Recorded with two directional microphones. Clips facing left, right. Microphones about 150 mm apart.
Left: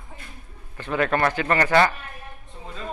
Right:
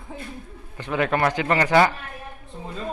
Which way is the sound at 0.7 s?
15° right (ahead or behind).